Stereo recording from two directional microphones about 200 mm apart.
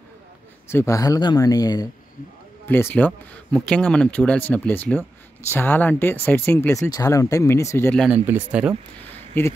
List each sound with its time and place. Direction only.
0.7 s speech: 15° left (ahead or behind)
8.0 s speech: 5° right (ahead or behind)
9.0 s a sound: 10° left (ahead or behind)